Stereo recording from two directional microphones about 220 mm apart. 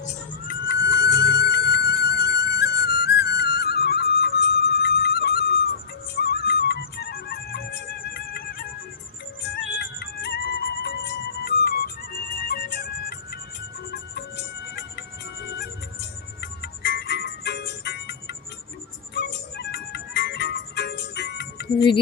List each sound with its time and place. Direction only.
0.9 s music: 50° left (ahead or behind)
9.7 s music: 50° left (ahead or behind)